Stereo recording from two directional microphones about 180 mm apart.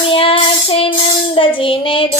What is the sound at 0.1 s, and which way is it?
Child singing, 30° left (ahead or behind).